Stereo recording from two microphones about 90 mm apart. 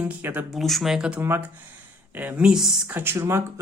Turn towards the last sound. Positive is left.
turn(degrees=-25)  # may be behind; listen again after turning